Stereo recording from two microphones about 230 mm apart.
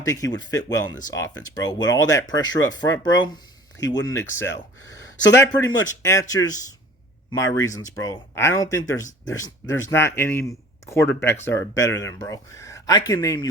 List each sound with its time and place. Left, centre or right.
0.0 s speech: centre
3.8 s speech: left
4.0 s speech: centre